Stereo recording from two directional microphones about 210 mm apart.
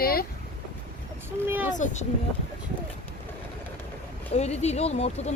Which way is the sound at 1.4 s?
10° right (ahead or behind).